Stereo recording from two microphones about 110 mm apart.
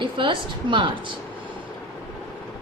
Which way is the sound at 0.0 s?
50° right (ahead or behind).